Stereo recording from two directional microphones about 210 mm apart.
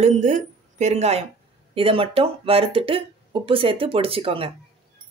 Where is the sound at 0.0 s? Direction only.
35° right (ahead or behind).